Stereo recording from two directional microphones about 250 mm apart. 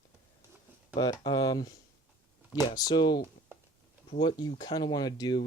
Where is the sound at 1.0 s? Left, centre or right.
Centre.